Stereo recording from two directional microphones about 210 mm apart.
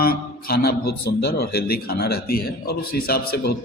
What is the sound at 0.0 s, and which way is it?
A man's voice, 45° left (ahead or behind).